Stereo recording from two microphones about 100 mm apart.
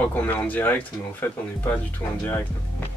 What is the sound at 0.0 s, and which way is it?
Speech, 15° left (ahead or behind).